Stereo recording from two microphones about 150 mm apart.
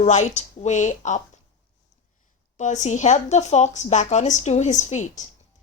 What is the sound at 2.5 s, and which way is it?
Speech, 55° left (ahead or behind).